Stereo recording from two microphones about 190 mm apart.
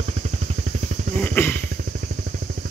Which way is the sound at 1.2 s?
10° left (ahead or behind).